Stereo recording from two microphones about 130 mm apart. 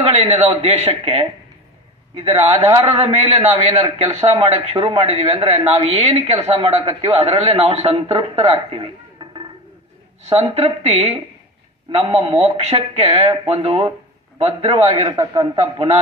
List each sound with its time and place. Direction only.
0.0 s a man's voice: 45° right (ahead or behind)
10.2 s a man's voice: 50° right (ahead or behind)